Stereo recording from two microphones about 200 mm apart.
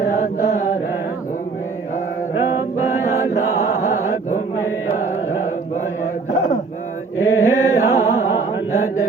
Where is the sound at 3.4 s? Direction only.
90° left.